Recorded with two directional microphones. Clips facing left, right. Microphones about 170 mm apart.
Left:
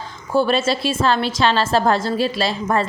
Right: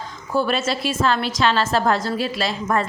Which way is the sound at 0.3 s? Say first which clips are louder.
Left 4 dB; 30° left (ahead or behind).